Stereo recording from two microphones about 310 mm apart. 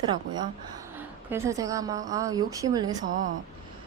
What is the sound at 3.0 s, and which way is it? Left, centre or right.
Speech, right.